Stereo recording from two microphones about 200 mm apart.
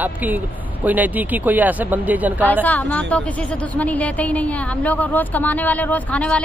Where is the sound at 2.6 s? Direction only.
10° left (ahead or behind).